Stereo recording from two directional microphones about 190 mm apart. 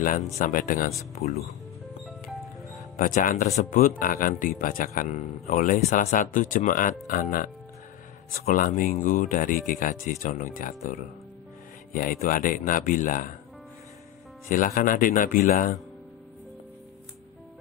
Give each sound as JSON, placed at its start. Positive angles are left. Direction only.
{"t": 0.4, "sound": "speech", "side_deg": 45}
{"t": 3.0, "sound": "speech", "side_deg": 45}
{"t": 14.5, "sound": "speech", "side_deg": 45}